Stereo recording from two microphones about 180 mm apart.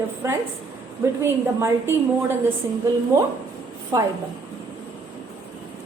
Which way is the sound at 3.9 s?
15° right (ahead or behind).